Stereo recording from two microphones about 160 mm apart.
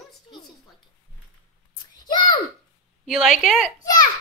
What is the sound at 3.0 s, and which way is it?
Speech, centre (ahead or behind).